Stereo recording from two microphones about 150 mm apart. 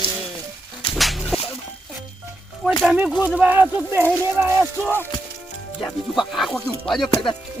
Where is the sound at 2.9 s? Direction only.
10° right (ahead or behind).